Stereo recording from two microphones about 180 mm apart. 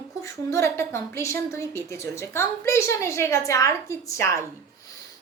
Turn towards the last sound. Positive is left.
turn(degrees=15)  # may be behind; listen again after turning